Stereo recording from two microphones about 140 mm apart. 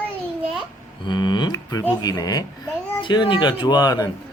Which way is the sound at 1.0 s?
35° left (ahead or behind).